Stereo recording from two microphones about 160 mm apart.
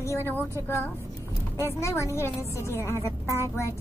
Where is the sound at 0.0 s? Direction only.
15° left (ahead or behind).